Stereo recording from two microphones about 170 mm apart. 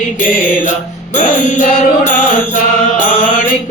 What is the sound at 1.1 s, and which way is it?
Mantra, 50° left (ahead or behind).